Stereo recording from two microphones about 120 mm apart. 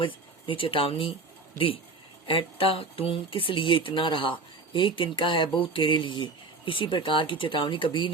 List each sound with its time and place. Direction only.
0.0 s speech: 45° left (ahead or behind)